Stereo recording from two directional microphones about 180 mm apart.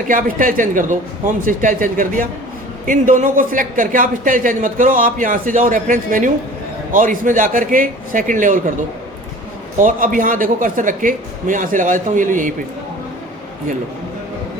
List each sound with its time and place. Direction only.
0.1 s speech: 50° right (ahead or behind)
9.7 s speech: 45° right (ahead or behind)